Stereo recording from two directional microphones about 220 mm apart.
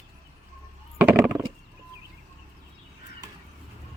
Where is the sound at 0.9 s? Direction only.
10° right (ahead or behind).